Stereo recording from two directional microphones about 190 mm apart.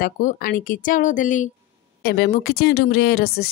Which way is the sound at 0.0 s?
45° left (ahead or behind).